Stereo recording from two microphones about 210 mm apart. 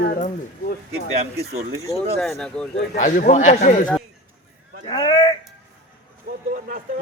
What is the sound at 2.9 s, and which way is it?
Speech, 40° left (ahead or behind).